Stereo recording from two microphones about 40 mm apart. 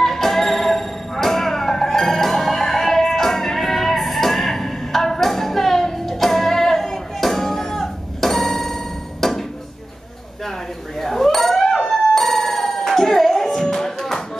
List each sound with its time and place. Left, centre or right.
0.0 s music: centre
11.0 s a sound: centre
11.9 s music: centre